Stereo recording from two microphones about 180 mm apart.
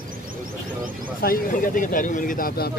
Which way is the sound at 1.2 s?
50° left (ahead or behind).